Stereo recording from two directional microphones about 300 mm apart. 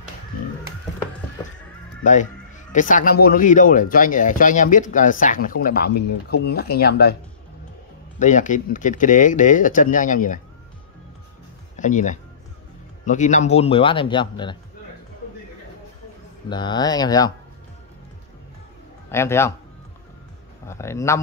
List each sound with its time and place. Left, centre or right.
2.7 s speech: left
8.2 s speech: left
11.7 s speech: left
16.4 s speech: centre
19.0 s a man's voice: centre
20.6 s speech: centre